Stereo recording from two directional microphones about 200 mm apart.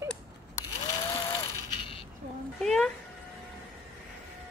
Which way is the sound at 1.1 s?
25° left (ahead or behind).